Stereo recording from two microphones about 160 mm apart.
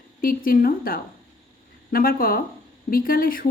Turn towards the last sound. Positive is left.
turn(degrees=65)  # may be behind; listen again after turning